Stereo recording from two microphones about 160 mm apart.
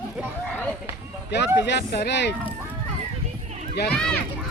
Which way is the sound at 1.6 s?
90° left.